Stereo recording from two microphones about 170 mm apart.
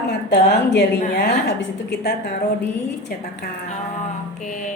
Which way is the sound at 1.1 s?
70° left (ahead or behind).